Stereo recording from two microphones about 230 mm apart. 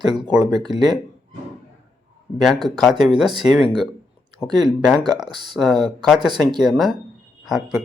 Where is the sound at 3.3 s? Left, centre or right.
Centre.